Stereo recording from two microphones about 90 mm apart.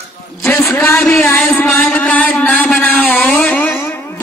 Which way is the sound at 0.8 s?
20° left (ahead or behind).